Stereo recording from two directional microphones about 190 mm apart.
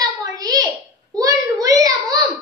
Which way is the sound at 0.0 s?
20° right (ahead or behind).